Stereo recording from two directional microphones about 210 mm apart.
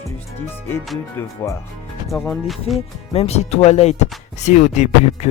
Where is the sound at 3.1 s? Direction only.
30° left (ahead or behind).